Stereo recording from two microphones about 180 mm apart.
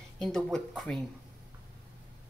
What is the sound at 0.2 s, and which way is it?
Speech, 5° left (ahead or behind).